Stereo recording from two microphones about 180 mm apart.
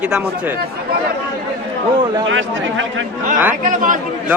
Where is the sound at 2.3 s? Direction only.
90° right.